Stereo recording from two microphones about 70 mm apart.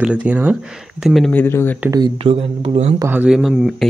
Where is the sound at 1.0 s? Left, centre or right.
Centre.